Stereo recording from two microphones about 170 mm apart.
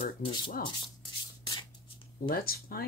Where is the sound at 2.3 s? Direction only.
60° left (ahead or behind).